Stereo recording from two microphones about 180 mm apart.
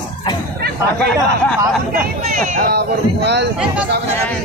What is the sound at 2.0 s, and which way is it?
Speech, 55° right (ahead or behind).